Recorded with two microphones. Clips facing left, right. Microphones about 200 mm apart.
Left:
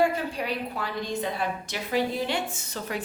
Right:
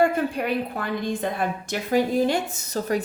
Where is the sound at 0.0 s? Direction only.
55° right (ahead or behind).